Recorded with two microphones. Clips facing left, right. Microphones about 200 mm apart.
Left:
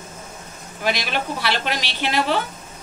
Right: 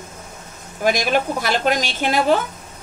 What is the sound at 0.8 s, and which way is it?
A woman's voice, 45° right (ahead or behind).